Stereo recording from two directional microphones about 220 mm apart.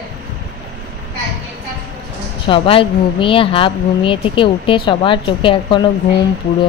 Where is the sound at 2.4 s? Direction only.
25° left (ahead or behind).